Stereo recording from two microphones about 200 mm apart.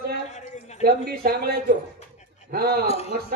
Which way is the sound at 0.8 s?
50° right (ahead or behind).